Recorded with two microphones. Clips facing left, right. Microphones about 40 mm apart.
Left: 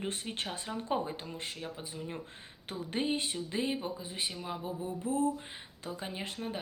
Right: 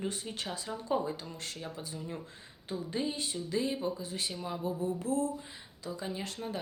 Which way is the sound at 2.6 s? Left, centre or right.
Left.